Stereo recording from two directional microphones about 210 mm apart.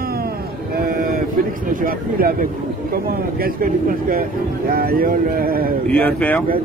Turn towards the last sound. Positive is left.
turn(degrees=5)  # may be behind; listen again after turning